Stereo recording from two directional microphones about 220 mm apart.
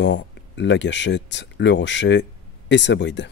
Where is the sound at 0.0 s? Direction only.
55° left (ahead or behind).